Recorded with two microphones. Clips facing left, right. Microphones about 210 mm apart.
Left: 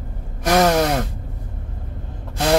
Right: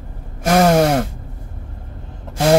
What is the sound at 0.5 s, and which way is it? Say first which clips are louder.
Gasp: right 3 dB; 50° right (ahead or behind).